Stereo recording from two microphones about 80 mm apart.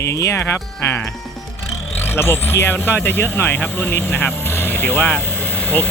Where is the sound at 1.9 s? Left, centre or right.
Left.